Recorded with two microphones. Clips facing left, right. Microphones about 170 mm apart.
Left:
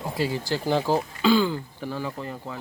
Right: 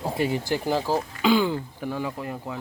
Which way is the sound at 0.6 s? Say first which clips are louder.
Left 3 dB; 5° right (ahead or behind).